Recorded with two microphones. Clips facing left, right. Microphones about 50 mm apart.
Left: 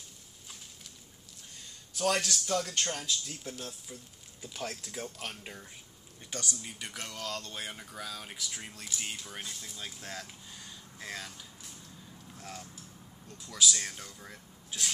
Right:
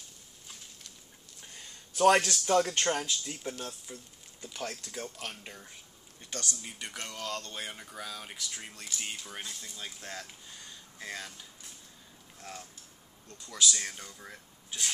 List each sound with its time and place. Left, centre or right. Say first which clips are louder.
2.0 s speech: right 7 dB; right
3.5 s speech: right 2 dB; centre
6.6 s speech: right 1 dB; centre